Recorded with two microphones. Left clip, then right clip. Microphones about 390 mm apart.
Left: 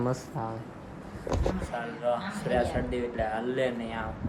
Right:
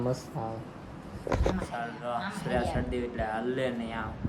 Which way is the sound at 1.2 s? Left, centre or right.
Centre.